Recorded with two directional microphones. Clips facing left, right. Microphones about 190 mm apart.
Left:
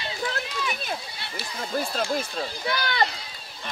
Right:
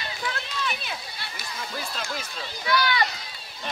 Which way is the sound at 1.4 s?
30° left (ahead or behind).